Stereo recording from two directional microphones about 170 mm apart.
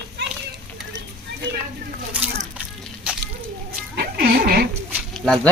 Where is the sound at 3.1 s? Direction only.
10° right (ahead or behind).